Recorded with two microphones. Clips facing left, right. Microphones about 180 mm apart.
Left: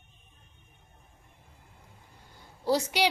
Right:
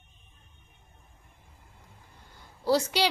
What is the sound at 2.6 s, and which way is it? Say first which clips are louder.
Speech: right 1 dB; 15° left (ahead or behind).